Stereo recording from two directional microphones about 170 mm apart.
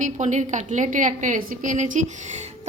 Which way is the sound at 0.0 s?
45° right (ahead or behind).